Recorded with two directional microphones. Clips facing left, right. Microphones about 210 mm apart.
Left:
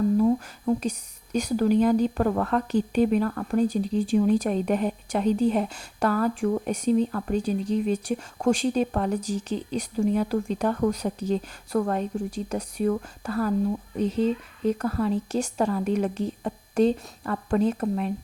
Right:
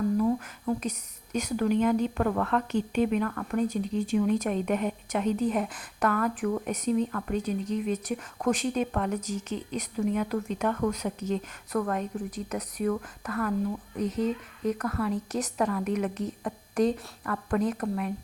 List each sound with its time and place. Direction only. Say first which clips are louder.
0.2 s a woman's voice: left 4 dB; 30° left (ahead or behind)